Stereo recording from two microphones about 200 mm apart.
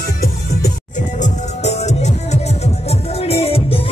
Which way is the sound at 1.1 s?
35° left (ahead or behind).